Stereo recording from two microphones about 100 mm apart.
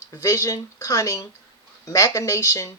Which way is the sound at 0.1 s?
35° left (ahead or behind).